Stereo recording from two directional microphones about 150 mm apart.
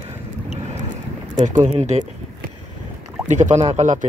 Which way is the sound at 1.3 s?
55° right (ahead or behind).